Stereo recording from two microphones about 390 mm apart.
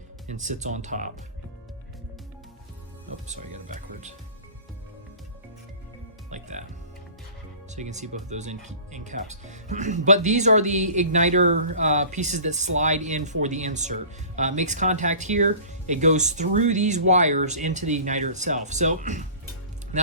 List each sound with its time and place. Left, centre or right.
0.3 s speech: centre
3.2 s speech: centre
6.3 s music: centre
7.7 s speech: centre